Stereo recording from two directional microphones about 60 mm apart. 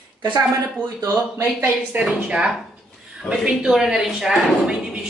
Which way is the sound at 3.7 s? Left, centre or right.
Centre.